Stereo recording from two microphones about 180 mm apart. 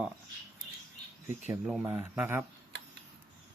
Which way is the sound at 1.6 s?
5° right (ahead or behind).